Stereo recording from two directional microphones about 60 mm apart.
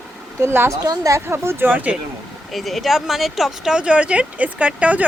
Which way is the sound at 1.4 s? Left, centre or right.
Right.